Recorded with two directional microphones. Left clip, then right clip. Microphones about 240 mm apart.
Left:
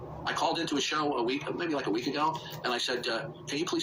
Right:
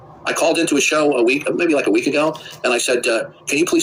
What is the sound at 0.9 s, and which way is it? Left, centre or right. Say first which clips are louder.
Speech: right 15 dB; right.